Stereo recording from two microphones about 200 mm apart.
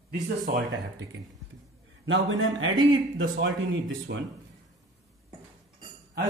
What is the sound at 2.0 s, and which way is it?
Speech, 75° right (ahead or behind).